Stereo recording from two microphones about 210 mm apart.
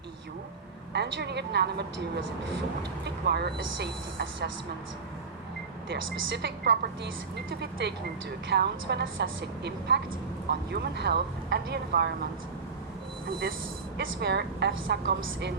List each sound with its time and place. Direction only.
0.9 s a woman's voice: 55° right (ahead or behind)
3.0 s a woman's voice: 50° right (ahead or behind)
5.9 s a woman's voice: 55° right (ahead or behind)
14.0 s a woman's voice: 55° right (ahead or behind)